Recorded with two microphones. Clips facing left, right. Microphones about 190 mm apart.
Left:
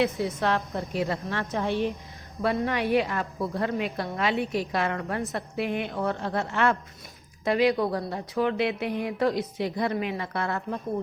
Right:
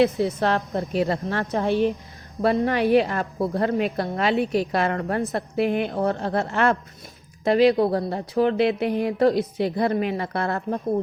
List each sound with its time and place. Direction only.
0.0 s speech: 35° right (ahead or behind)